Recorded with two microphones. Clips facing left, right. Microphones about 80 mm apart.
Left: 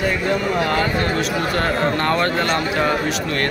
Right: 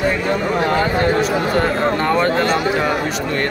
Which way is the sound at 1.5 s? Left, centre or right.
Centre.